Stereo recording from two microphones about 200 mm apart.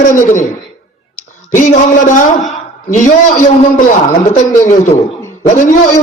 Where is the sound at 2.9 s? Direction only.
40° left (ahead or behind).